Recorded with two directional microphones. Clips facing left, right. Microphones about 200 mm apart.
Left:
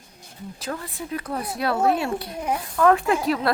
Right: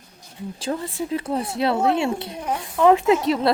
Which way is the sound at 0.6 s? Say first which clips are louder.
Right 6 dB; 25° right (ahead or behind).